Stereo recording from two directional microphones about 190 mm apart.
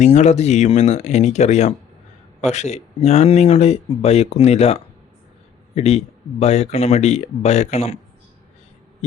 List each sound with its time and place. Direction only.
0.0 s speech: 35° left (ahead or behind)